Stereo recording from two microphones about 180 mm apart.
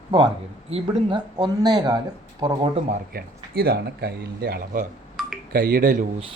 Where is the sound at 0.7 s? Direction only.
25° right (ahead or behind).